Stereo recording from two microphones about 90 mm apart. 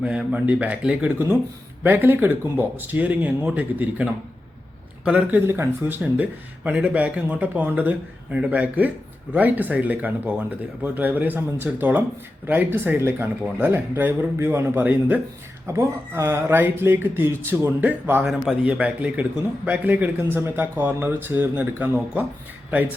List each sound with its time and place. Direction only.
0.0 s a man's voice: 15° right (ahead or behind)
5.5 s a man's voice: 25° right (ahead or behind)
18.3 s speech: 5° right (ahead or behind)
18.7 s a man's voice: 20° right (ahead or behind)